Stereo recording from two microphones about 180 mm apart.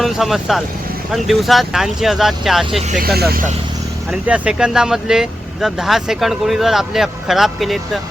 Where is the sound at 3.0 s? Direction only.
60° right (ahead or behind).